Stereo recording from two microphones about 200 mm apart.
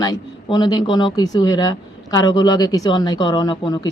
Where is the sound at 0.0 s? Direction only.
20° left (ahead or behind).